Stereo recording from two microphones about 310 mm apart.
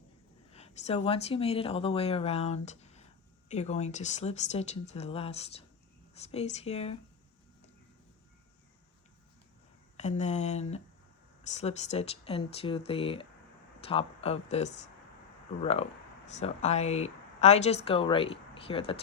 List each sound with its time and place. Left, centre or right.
0.5 s speech: left
10.0 s speech: left